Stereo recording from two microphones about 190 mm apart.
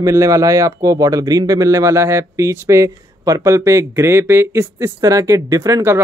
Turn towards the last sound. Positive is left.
turn(degrees=-15)  # may be behind; listen again after turning